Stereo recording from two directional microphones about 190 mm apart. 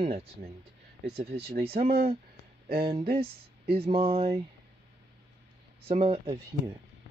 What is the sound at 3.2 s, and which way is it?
Speech, 30° right (ahead or behind).